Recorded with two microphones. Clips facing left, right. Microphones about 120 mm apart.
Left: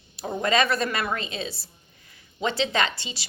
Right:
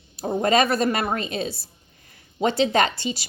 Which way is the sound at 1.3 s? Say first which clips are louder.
Right 5 dB; 50° right (ahead or behind).